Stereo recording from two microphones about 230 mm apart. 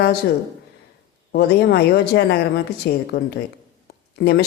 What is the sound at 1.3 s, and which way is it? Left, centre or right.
Speech, left.